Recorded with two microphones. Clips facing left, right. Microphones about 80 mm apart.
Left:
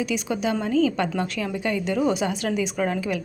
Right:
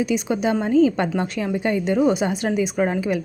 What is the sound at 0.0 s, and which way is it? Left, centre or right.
A woman's voice, right.